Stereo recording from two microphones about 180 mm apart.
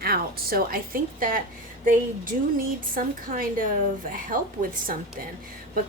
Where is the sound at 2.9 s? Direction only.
50° right (ahead or behind).